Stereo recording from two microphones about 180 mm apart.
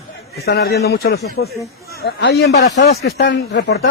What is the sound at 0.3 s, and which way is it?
Speech, 65° left (ahead or behind).